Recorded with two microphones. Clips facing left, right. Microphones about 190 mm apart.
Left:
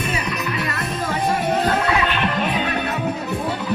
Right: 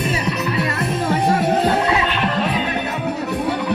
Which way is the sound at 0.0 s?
30° right (ahead or behind).